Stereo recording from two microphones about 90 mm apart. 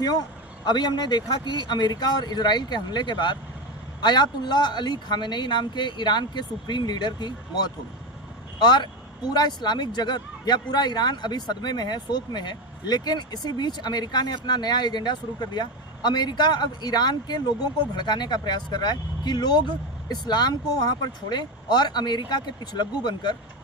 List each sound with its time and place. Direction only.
0.6 s speech: 55° left (ahead or behind)